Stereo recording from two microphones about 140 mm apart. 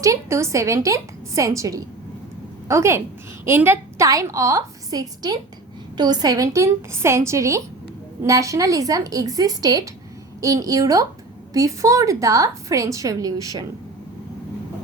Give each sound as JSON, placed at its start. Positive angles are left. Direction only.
{"t": 0.0, "sound": "a woman's voice", "side_deg": -20}